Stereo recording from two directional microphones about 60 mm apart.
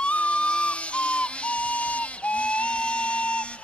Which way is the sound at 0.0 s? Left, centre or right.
Left.